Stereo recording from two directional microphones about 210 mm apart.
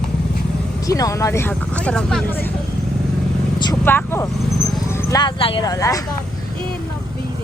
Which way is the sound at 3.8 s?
10° left (ahead or behind).